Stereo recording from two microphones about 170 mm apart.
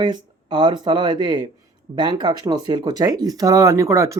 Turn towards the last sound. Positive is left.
turn(degrees=-20)  # may be behind; listen again after turning